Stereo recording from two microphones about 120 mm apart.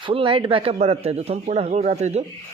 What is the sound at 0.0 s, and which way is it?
Speech, 50° right (ahead or behind).